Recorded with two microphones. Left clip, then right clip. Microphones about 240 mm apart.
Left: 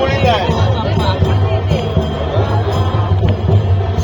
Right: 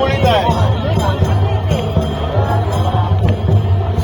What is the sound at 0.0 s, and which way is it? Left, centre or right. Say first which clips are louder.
Music: even; centre.